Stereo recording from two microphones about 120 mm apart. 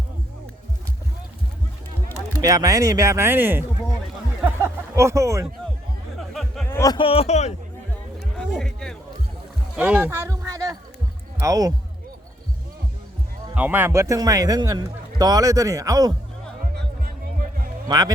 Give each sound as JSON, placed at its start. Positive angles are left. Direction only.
{"t": 2.4, "sound": "a man's voice", "side_deg": -30}
{"t": 4.4, "sound": "a sound", "side_deg": -20}
{"t": 6.1, "sound": "music", "side_deg": 0}
{"t": 6.7, "sound": "a sound", "side_deg": 25}
{"t": 6.9, "sound": "speech", "side_deg": 50}
{"t": 8.2, "sound": "music", "side_deg": 5}
{"t": 9.7, "sound": "a sound", "side_deg": -10}
{"t": 11.3, "sound": "speech", "side_deg": -30}
{"t": 13.6, "sound": "a man's voice", "side_deg": -15}
{"t": 17.8, "sound": "speech", "side_deg": -35}